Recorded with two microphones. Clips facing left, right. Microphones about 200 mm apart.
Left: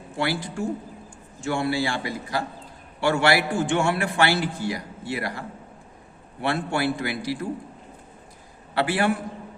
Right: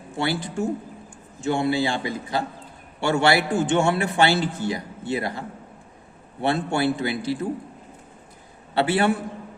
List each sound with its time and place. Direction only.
0.2 s a man's voice: 25° right (ahead or behind)
8.7 s a man's voice: 25° right (ahead or behind)